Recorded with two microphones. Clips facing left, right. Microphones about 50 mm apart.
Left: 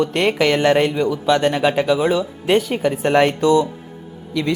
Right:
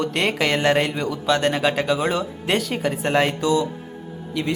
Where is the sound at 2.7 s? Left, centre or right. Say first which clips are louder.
Left 4 dB; centre.